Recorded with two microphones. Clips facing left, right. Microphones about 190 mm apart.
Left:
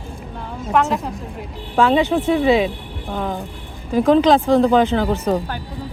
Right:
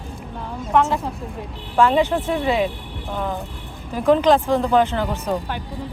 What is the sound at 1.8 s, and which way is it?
Speech, 90° left.